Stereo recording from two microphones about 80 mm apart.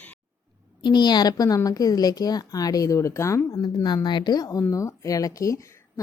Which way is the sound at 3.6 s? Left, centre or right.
Left.